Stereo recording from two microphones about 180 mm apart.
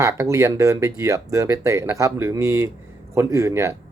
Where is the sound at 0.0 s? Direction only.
15° right (ahead or behind).